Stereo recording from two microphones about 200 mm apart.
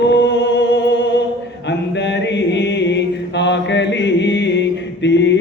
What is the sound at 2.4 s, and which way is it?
Mantra, 60° left (ahead or behind).